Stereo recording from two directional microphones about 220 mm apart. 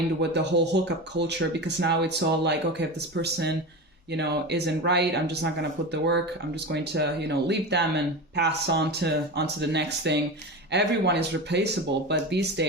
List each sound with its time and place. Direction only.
0.2 s speech: 50° right (ahead or behind)